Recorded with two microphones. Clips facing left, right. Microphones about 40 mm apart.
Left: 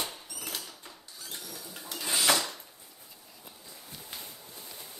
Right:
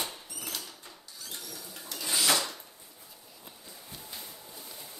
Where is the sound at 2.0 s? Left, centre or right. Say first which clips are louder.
Even; centre.